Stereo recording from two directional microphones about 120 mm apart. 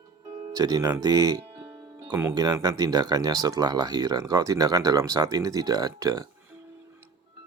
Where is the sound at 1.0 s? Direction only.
30° right (ahead or behind).